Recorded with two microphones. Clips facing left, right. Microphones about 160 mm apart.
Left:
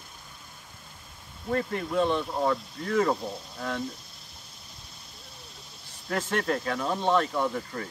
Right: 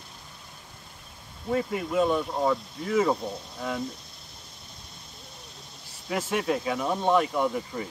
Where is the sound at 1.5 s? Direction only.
5° right (ahead or behind).